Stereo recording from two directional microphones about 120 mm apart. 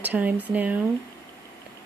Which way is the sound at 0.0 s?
15° right (ahead or behind).